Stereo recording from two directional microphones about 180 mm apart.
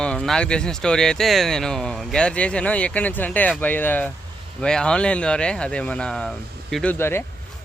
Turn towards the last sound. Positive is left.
turn(degrees=15)  # may be behind; listen again after turning